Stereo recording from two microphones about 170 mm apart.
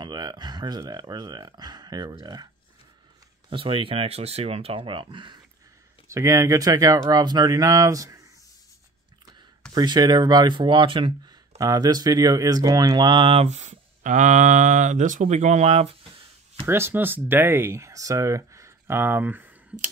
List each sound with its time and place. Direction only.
0.0 s speech: 25° right (ahead or behind)
6.0 s speech: 15° right (ahead or behind)
9.8 s speech: 25° right (ahead or behind)
16.6 s speech: 15° right (ahead or behind)